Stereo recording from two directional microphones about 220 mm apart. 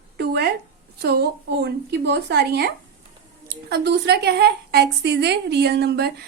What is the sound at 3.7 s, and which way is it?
Speech, 50° right (ahead or behind).